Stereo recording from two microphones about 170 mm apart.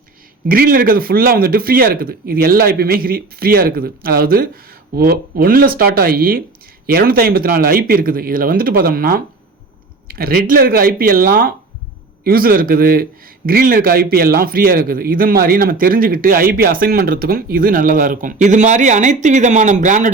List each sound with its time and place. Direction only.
0.4 s a man's voice: 60° right (ahead or behind)